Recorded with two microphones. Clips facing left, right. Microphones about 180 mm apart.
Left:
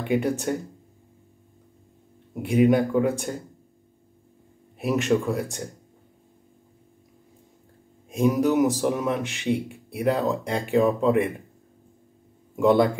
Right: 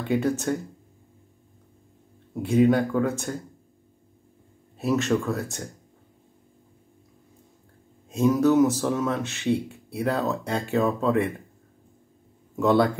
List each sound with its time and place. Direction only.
0.0 s speech: 15° left (ahead or behind)
2.4 s speech: 15° left (ahead or behind)
4.7 s speech: 15° left (ahead or behind)
8.1 s speech: 15° left (ahead or behind)
12.5 s speech: 15° left (ahead or behind)